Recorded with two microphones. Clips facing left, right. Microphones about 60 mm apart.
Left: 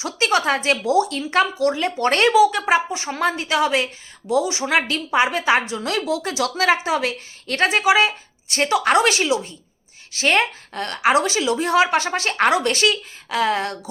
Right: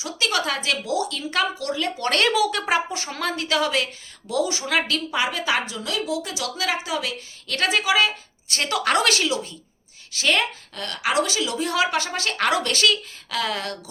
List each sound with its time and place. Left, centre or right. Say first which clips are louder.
0.0 s speech: left 5 dB; left
2.3 s a woman's voice: left 6 dB; centre
10.1 s a woman's voice: left 3 dB; left